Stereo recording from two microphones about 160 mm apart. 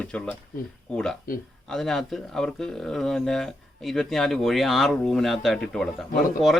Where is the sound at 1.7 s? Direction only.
Centre (ahead or behind).